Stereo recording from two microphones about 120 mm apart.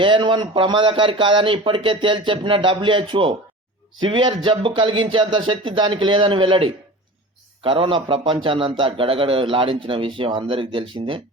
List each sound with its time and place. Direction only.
0.0 s a man's voice: 45° right (ahead or behind)